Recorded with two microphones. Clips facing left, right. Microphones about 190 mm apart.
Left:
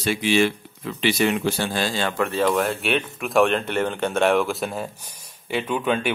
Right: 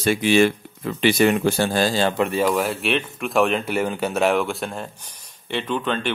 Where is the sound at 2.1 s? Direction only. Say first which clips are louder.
Right 1 dB; 15° right (ahead or behind).